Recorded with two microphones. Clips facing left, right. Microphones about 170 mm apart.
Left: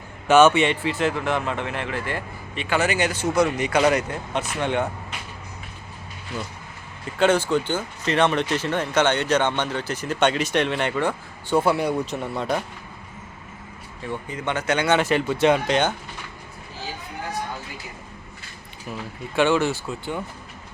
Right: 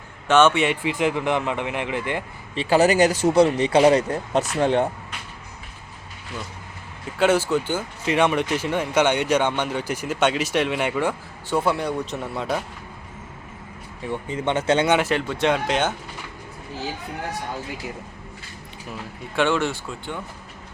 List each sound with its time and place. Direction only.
0.3 s a man's voice: 10° left (ahead or behind)
0.6 s speech: 10° right (ahead or behind)
2.6 s speech: 35° right (ahead or behind)
7.2 s speech: 5° right (ahead or behind)
14.1 s speech: 25° right (ahead or behind)
15.0 s speech: 5° left (ahead or behind)
19.4 s speech: 5° left (ahead or behind)